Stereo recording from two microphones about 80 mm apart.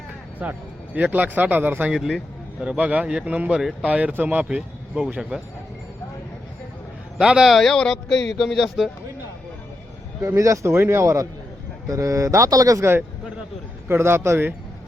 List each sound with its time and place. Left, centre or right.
0.4 s speech: centre
1.9 s speech: centre
3.6 s speech: centre
3.8 s speech: centre
7.2 s speech: centre
7.5 s speech: centre
10.2 s speech: right
13.8 s speech: right